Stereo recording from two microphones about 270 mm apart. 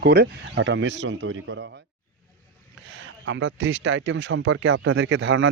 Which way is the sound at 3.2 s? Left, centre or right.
Right.